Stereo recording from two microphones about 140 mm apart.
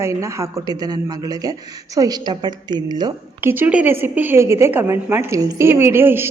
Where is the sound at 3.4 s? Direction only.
15° right (ahead or behind).